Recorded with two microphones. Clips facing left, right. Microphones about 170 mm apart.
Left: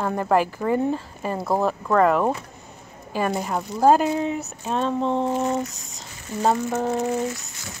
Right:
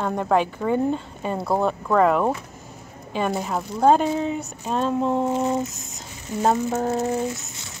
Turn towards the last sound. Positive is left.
turn(degrees=-5)  # may be behind; listen again after turning